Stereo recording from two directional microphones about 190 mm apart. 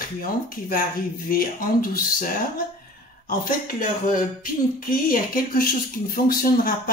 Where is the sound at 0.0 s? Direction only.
45° left (ahead or behind).